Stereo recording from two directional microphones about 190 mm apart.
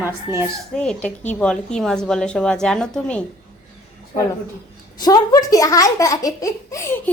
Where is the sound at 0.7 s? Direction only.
5° left (ahead or behind).